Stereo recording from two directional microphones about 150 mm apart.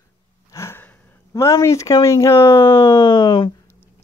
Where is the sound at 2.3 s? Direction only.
30° left (ahead or behind).